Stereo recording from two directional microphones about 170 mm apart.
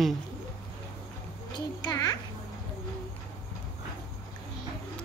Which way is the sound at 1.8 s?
25° left (ahead or behind).